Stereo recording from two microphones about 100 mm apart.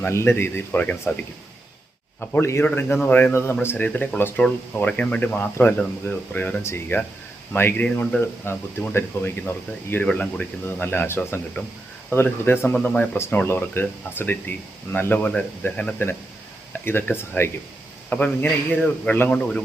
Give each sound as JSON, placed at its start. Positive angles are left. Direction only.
{"t": 0.0, "sound": "speech", "side_deg": 25}
{"t": 2.4, "sound": "speech", "side_deg": 25}
{"t": 12.7, "sound": "speech", "side_deg": 10}
{"t": 13.1, "sound": "speech", "side_deg": 25}